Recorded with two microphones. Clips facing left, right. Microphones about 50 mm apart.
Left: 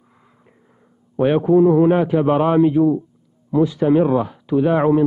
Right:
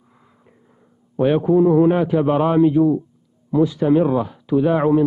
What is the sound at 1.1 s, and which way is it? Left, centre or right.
A man's voice, centre.